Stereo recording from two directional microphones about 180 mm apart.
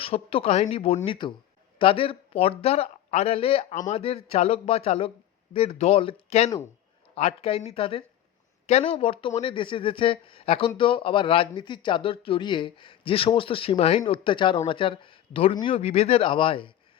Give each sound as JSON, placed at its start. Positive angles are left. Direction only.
{"t": 0.0, "sound": "speech", "side_deg": 30}